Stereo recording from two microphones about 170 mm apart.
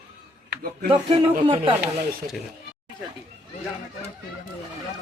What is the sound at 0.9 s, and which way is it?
Speech, 30° right (ahead or behind).